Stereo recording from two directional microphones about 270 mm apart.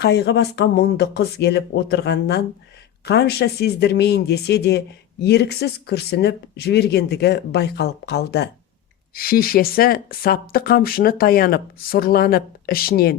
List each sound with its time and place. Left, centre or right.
0.0 s speech: left